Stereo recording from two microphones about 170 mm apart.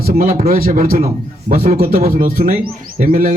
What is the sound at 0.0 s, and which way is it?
A man's voice, 60° right (ahead or behind).